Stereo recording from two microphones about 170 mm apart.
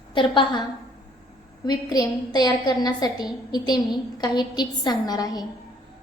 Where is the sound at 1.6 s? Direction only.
25° left (ahead or behind).